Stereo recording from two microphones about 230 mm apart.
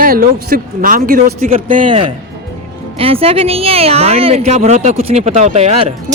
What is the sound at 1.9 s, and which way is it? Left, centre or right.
Speech, right.